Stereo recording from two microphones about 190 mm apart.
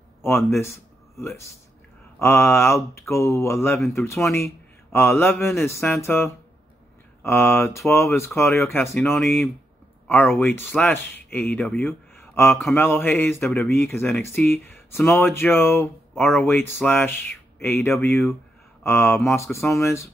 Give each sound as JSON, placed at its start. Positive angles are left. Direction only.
{"t": 0.5, "sound": "speech", "side_deg": 15}
{"t": 2.1, "sound": "speech", "side_deg": 10}